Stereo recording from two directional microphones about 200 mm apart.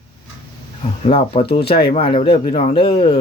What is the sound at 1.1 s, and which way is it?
Speech, 30° left (ahead or behind).